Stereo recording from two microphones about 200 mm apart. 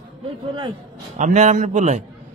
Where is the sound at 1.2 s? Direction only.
35° right (ahead or behind).